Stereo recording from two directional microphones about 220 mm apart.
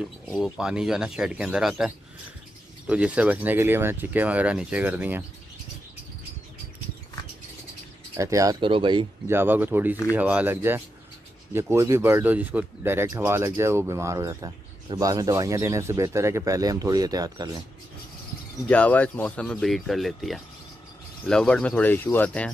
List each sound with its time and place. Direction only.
0.0 s speech: 5° right (ahead or behind)
2.9 s speech: 5° right (ahead or behind)
8.2 s speech: 15° right (ahead or behind)
9.3 s speech: 10° right (ahead or behind)
18.7 s speech: 5° left (ahead or behind)